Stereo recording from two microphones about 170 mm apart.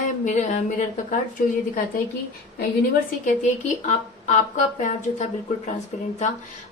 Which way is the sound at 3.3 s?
45° left (ahead or behind).